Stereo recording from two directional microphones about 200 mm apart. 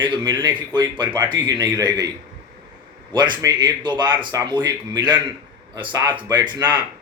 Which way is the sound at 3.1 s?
20° right (ahead or behind).